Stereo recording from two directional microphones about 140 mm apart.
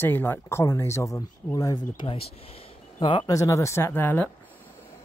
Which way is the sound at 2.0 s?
40° left (ahead or behind).